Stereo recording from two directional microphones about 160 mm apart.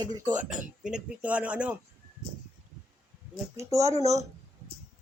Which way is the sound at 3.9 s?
45° right (ahead or behind).